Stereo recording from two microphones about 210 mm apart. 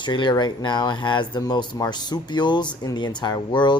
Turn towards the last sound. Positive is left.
turn(degrees=20)  # may be behind; listen again after turning